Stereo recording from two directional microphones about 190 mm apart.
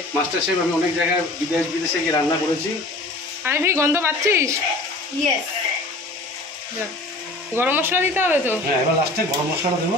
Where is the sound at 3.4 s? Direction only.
15° right (ahead or behind).